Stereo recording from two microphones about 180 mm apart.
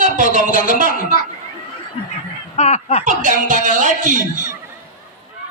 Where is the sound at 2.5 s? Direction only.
35° left (ahead or behind).